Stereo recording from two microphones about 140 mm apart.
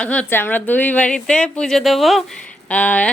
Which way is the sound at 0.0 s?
10° left (ahead or behind).